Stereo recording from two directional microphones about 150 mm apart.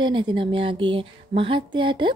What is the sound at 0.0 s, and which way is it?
A woman's voice, 35° right (ahead or behind).